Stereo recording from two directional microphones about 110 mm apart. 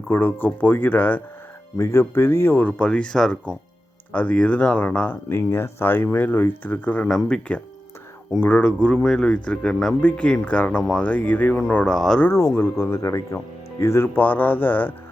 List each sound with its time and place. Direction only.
0.1 s speech: 20° left (ahead or behind); by 12.2 s 5° left (ahead or behind)
12.2 s speech: 25° left (ahead or behind)